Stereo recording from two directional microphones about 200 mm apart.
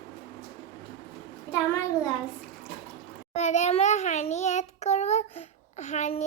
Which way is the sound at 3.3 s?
35° left (ahead or behind).